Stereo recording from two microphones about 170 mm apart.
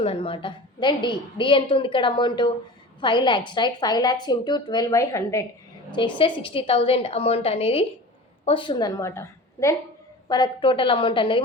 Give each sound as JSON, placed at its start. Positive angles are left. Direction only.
{"t": 0.0, "sound": "a woman's voice", "side_deg": 35}
{"t": 6.0, "sound": "a woman's voice", "side_deg": 30}